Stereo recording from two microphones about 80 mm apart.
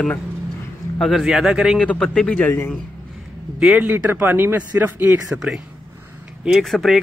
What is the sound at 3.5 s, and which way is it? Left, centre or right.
Speech, centre.